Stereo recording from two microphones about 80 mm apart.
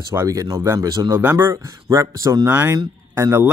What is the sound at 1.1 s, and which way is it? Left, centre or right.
Speech, right.